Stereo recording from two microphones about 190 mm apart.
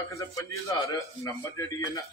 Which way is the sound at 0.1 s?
15° left (ahead or behind).